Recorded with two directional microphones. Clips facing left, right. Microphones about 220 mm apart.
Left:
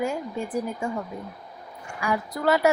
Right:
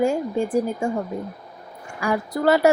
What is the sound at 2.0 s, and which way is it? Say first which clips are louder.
Speech: right 4 dB; 40° right (ahead or behind).